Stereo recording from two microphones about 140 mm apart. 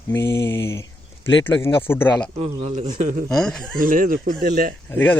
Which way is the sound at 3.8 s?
80° right.